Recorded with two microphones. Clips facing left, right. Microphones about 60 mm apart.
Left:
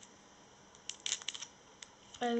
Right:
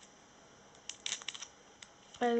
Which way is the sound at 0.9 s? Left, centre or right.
Centre.